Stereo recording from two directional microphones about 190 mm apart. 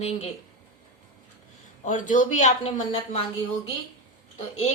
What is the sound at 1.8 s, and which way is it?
Speech, 40° left (ahead or behind).